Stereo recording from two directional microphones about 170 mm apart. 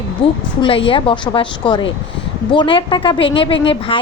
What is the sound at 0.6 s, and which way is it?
A woman's voice, 30° left (ahead or behind).